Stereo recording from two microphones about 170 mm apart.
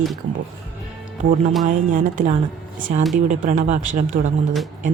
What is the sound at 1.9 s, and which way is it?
A woman's voice, 50° right (ahead or behind).